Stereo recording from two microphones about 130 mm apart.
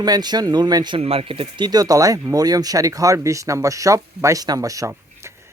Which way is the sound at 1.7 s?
30° right (ahead or behind).